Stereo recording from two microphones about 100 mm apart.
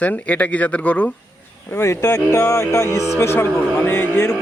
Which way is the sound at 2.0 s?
35° left (ahead or behind).